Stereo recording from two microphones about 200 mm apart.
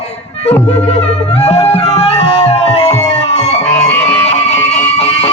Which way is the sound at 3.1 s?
35° left (ahead or behind).